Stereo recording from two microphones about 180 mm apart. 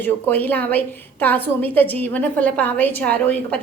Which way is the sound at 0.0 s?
10° left (ahead or behind).